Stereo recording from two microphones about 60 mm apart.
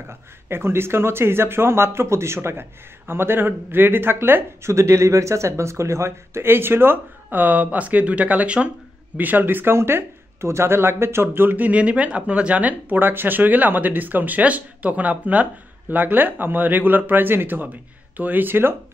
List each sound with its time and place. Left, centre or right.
0.5 s speech: right
4.6 s speech: right